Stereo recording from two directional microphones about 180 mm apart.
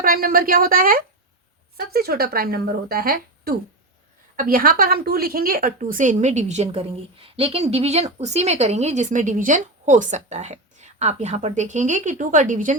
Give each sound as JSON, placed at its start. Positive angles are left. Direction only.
{"t": 0.0, "sound": "a woman's voice", "side_deg": -55}